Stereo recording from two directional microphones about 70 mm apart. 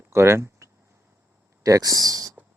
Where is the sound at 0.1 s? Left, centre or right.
Right.